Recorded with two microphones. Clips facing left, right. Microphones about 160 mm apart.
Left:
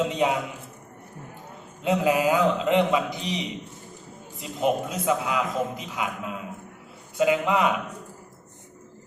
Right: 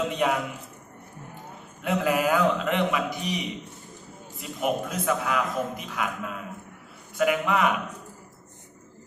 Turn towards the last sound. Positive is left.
turn(degrees=20)  # may be behind; listen again after turning